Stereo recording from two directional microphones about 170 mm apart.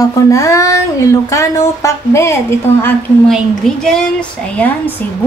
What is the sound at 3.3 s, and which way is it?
A woman's voice, 5° left (ahead or behind).